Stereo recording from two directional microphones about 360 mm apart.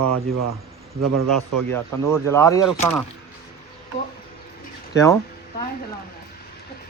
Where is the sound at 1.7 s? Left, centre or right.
Centre.